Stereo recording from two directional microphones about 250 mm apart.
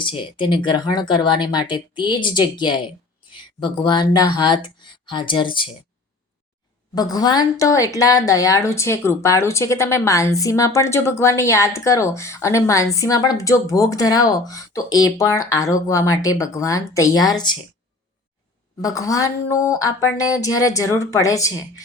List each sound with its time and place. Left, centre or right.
0.0 s speech: centre
6.9 s speech: centre
18.8 s speech: centre